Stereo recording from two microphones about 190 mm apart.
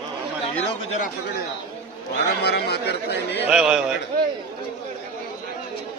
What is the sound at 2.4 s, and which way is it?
Speech, 60° left (ahead or behind).